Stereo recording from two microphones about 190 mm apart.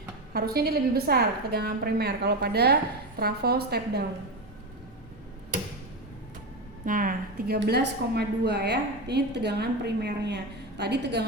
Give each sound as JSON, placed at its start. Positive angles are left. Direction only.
{"t": 0.3, "sound": "a woman's voice", "side_deg": -55}
{"t": 6.8, "sound": "a woman's voice", "side_deg": -45}